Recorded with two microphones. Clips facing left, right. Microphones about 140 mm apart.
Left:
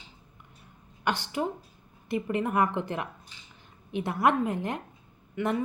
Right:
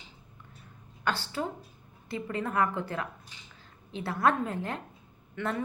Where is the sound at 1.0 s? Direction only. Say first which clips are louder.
Left 3 dB; 15° left (ahead or behind).